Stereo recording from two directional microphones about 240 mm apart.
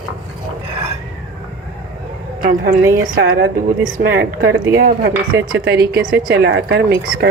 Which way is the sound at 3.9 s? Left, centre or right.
Right.